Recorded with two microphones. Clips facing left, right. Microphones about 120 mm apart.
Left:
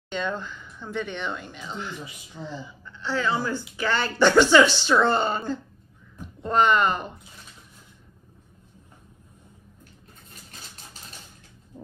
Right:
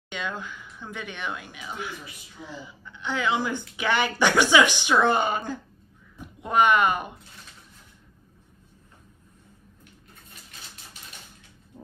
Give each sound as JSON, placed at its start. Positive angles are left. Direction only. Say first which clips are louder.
{"t": 0.1, "sound": "speech", "louder": "left 4 dB", "side_deg": -10}
{"t": 6.4, "sound": "speech", "louder": "even", "side_deg": -10}